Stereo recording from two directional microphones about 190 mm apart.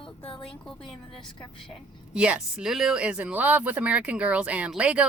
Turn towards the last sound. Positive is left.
turn(degrees=-5)  # may be behind; listen again after turning